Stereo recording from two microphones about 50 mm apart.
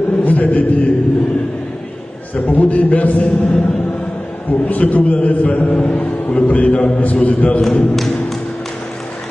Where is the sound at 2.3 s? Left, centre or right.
Left.